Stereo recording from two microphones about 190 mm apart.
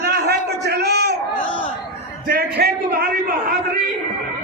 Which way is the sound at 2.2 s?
55° right (ahead or behind).